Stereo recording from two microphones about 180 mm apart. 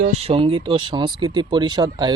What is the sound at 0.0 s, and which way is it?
Speech, 35° right (ahead or behind).